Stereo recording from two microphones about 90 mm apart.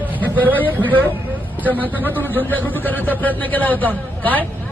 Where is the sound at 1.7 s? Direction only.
20° left (ahead or behind).